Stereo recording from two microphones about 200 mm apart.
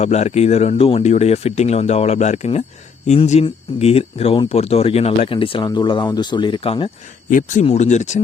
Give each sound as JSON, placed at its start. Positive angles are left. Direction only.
{"t": 0.0, "sound": "speech", "side_deg": 35}
{"t": 7.3, "sound": "speech", "side_deg": 40}